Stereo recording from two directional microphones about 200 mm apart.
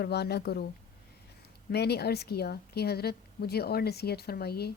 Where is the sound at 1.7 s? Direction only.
55° left (ahead or behind).